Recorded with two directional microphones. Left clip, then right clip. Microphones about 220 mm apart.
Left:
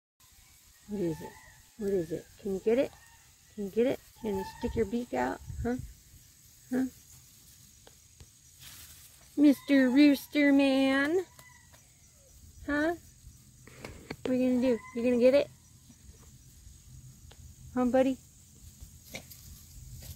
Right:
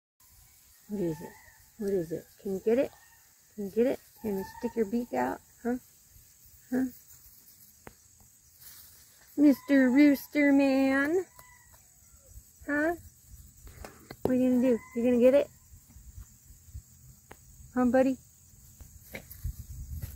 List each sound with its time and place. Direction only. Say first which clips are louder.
1.8 s speech: even; 5° left (ahead or behind)
9.4 s speech: right 1 dB; centre (ahead or behind)
12.6 s speech: right 1 dB; 5° left (ahead or behind)
14.0 s speech: right 2 dB; centre (ahead or behind)
17.7 s speech: right 1 dB; centre (ahead or behind)
19.1 s a sound: even; 25° right (ahead or behind)